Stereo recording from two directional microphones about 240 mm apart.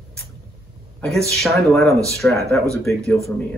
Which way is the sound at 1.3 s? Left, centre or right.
Centre.